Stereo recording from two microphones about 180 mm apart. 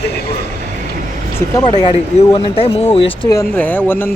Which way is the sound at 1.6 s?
25° left (ahead or behind).